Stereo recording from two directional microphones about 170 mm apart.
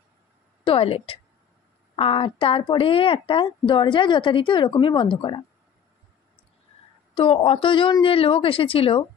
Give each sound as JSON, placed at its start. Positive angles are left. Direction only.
{"t": 0.7, "sound": "a woman's voice", "side_deg": 35}
{"t": 7.2, "sound": "a woman's voice", "side_deg": 35}